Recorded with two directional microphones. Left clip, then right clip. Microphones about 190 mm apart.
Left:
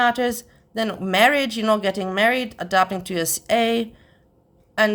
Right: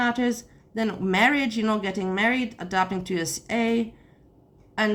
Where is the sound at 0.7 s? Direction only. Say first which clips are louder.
Left 4 dB; 40° left (ahead or behind).